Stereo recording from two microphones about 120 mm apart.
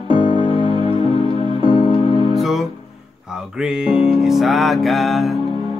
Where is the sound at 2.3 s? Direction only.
Centre (ahead or behind).